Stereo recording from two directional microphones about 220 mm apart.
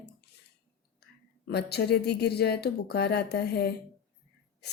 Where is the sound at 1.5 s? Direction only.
50° left (ahead or behind).